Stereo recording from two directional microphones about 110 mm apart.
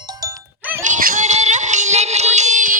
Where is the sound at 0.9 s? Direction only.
90° right.